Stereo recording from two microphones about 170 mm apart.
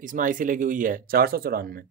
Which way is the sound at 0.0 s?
50° right (ahead or behind).